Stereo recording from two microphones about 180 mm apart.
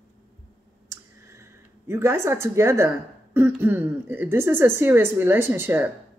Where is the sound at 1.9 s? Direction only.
15° right (ahead or behind).